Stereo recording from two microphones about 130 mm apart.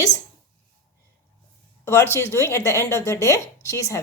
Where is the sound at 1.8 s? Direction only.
20° left (ahead or behind).